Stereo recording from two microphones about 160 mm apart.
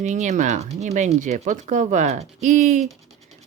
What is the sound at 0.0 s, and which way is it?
Speech, 50° right (ahead or behind).